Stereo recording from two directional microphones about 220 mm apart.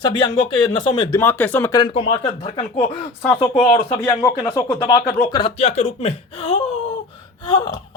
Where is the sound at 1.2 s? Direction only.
10° left (ahead or behind).